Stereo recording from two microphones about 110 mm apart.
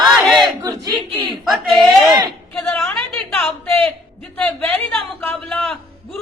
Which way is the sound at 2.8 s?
5° left (ahead or behind).